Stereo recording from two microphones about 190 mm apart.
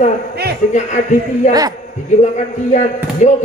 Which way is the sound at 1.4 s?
40° left (ahead or behind).